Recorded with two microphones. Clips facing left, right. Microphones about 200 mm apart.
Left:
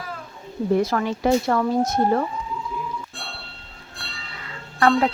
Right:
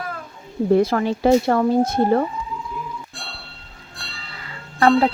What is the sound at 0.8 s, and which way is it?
Speech, 30° right (ahead or behind).